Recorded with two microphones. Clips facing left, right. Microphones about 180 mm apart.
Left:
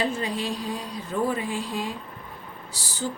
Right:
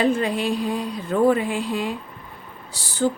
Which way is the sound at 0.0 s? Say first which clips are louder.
Right 7 dB; 60° right (ahead or behind).